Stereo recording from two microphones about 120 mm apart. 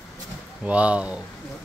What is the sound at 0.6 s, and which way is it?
Speech, 10° right (ahead or behind).